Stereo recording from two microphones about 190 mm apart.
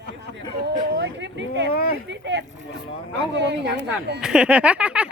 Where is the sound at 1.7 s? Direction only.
50° left (ahead or behind).